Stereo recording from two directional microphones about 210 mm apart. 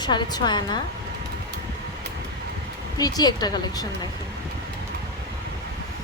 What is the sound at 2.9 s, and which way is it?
Speech, 20° left (ahead or behind).